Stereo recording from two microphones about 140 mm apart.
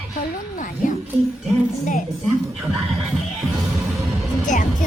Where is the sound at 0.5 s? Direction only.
70° left (ahead or behind).